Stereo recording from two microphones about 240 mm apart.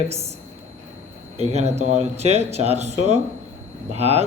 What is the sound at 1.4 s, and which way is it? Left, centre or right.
Speech, right.